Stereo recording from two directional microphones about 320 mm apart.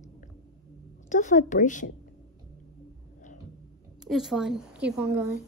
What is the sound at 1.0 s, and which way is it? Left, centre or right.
Speech, left.